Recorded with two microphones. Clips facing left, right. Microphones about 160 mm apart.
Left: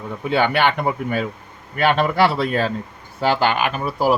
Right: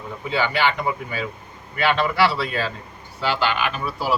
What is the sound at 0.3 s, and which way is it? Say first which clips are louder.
A man's voice: left 4 dB; 60° left (ahead or behind).